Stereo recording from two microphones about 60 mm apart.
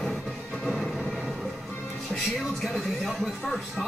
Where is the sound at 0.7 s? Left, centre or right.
Centre.